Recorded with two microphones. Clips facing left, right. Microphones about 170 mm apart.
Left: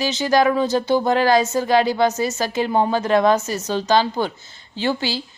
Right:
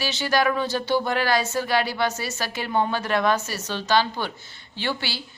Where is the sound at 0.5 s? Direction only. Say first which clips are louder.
Left 5 dB; 40° left (ahead or behind).